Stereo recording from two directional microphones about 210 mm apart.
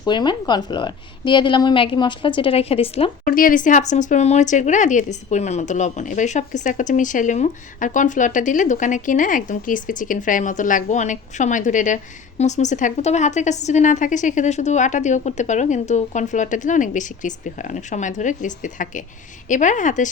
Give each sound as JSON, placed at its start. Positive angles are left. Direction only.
{"t": 0.0, "sound": "a woman's voice", "side_deg": 20}
{"t": 3.2, "sound": "a woman's voice", "side_deg": 40}